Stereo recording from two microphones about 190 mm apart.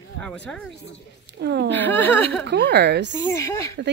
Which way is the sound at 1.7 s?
10° left (ahead or behind).